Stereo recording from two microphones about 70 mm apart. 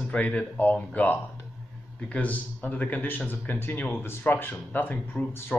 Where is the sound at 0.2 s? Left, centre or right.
Left.